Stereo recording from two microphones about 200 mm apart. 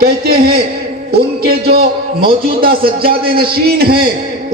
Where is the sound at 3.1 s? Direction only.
50° right (ahead or behind).